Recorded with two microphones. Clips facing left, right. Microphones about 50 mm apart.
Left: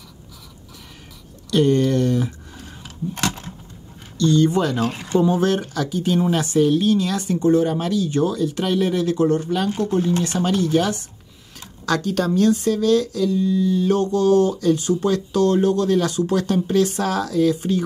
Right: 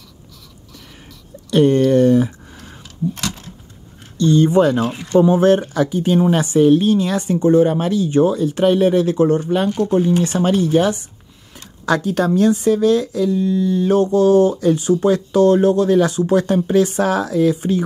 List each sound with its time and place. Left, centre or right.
1.5 s speech: right
1.9 s a sound: right
4.2 s speech: right
13.7 s speech: centre
17.0 s speech: right